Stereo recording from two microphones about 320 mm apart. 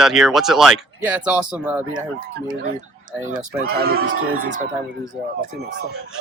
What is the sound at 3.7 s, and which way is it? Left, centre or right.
Speech, right.